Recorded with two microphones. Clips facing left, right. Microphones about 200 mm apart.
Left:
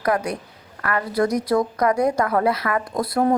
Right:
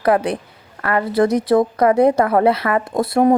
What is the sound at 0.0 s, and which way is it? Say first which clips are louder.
Speech: right 5 dB; 30° right (ahead or behind).